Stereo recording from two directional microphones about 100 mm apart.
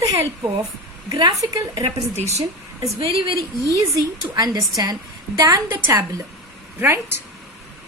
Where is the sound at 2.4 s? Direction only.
35° right (ahead or behind).